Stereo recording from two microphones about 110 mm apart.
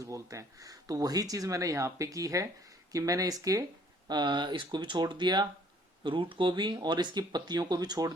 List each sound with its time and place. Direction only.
0.0 s speech: 30° right (ahead or behind)
4.1 s speech: 45° right (ahead or behind)